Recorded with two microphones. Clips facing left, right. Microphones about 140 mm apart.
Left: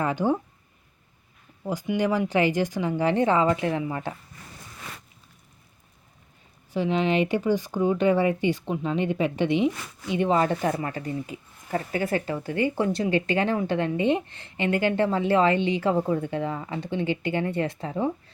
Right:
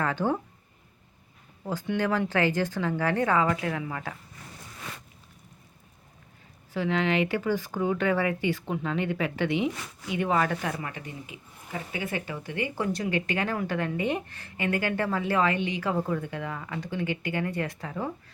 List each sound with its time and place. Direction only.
0.0 s speech: 15° left (ahead or behind)
1.6 s speech: 15° left (ahead or behind)
6.7 s speech: 20° left (ahead or behind)